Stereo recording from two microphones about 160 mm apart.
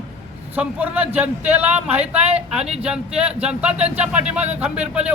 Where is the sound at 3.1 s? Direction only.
40° right (ahead or behind).